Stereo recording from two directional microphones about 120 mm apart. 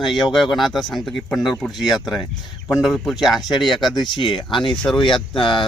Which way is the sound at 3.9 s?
40° left (ahead or behind).